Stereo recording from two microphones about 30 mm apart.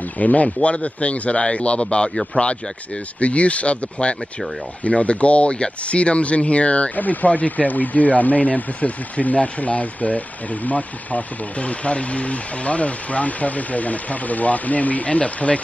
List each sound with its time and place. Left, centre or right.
0.2 s speech: left
2.3 s speech: left
7.0 s speech: left